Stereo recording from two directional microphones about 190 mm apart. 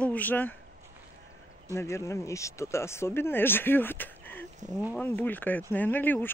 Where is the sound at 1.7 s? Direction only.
15° left (ahead or behind).